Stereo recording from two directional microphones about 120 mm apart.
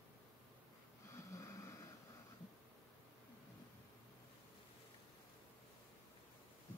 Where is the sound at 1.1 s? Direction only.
25° left (ahead or behind).